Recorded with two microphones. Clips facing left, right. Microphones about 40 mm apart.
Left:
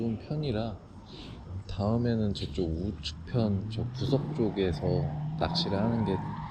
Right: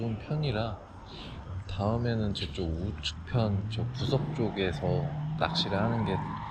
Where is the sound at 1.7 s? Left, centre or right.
Right.